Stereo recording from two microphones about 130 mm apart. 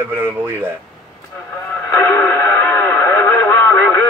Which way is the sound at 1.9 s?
20° left (ahead or behind).